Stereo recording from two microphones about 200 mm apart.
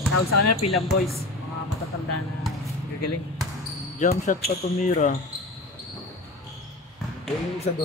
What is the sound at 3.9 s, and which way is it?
A man's voice, 40° left (ahead or behind).